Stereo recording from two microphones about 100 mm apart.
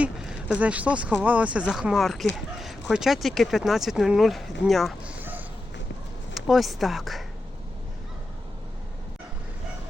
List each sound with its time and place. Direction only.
0.0 s speech: 10° right (ahead or behind)
5.0 s a sound: 15° right (ahead or behind)
6.3 s speech: centre (ahead or behind)